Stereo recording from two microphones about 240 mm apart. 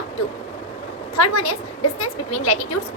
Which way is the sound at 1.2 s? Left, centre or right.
Left.